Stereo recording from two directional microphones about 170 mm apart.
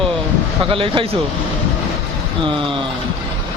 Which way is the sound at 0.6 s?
30° right (ahead or behind).